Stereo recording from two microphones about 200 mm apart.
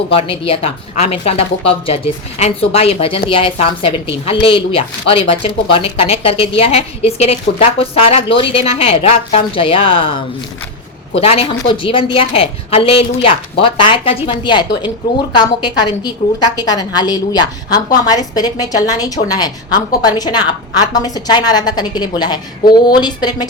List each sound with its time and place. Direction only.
0.1 s a woman's voice: 30° left (ahead or behind)